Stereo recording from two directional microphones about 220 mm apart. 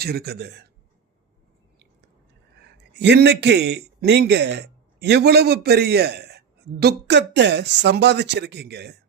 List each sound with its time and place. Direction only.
0.0 s a man's voice: 45° right (ahead or behind)
3.0 s a man's voice: 50° right (ahead or behind)